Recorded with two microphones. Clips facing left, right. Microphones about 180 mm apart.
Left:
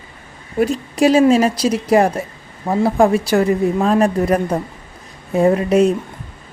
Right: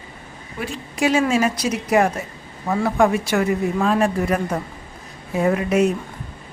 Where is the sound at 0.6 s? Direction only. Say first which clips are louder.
Left 8 dB; 40° left (ahead or behind).